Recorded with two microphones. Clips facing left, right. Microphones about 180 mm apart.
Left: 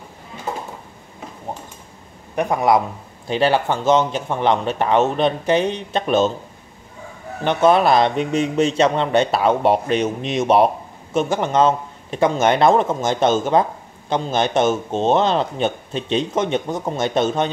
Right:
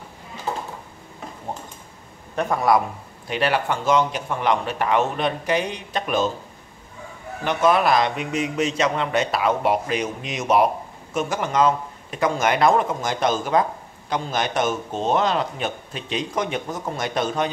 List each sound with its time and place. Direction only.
2.3 s a man's voice: 15° left (ahead or behind)
7.4 s a man's voice: 30° left (ahead or behind)